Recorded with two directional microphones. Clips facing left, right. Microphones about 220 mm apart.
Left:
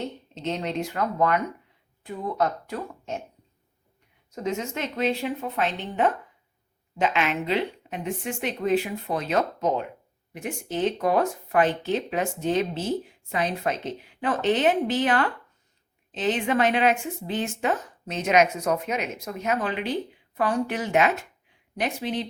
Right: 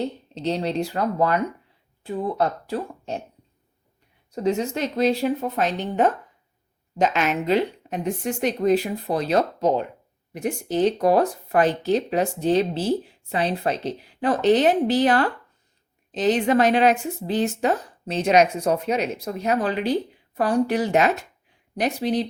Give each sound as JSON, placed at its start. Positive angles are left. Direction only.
{"t": 0.3, "sound": "speech", "side_deg": -35}
{"t": 4.3, "sound": "speech", "side_deg": -35}